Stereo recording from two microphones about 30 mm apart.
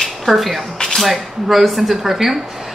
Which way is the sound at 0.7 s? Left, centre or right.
Centre.